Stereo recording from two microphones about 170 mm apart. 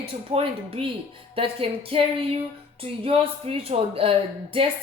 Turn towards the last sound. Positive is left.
turn(degrees=-35)  # may be behind; listen again after turning